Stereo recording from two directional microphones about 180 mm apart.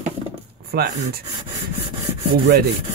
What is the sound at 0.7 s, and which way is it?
Rub, 70° right (ahead or behind).